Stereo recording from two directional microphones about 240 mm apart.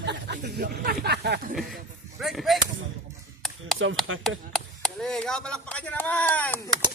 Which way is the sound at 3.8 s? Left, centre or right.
Right.